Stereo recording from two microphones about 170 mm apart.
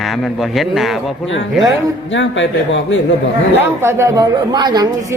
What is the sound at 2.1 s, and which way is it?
Speech, 90° left.